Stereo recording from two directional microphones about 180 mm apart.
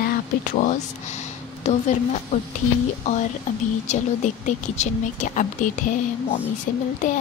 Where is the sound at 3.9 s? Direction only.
40° left (ahead or behind).